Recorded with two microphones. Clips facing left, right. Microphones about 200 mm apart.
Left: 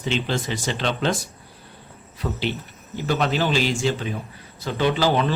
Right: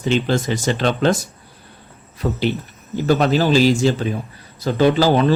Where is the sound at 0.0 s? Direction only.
45° right (ahead or behind).